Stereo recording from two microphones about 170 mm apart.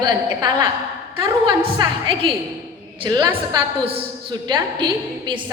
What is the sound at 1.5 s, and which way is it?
A woman's voice, 30° right (ahead or behind).